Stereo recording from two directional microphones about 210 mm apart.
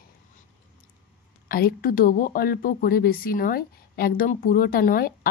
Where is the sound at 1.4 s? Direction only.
45° left (ahead or behind).